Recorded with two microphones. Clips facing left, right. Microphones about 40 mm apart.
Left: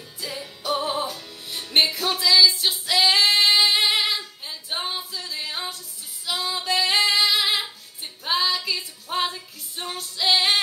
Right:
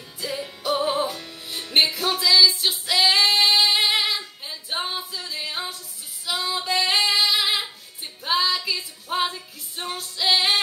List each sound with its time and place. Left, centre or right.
0.2 s music: centre
1.0 s music: right
1.7 s music: centre
4.5 s female singing: centre
8.0 s music: centre